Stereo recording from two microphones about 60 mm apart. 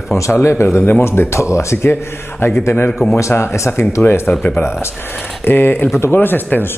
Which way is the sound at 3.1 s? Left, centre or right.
Left.